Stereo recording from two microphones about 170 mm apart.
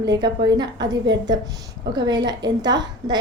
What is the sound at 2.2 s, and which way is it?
Speech, 25° right (ahead or behind).